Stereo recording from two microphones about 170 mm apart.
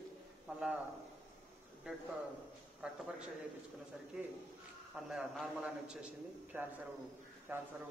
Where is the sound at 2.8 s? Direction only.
5° right (ahead or behind).